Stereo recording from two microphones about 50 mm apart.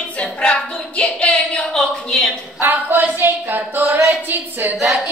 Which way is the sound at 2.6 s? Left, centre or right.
Right.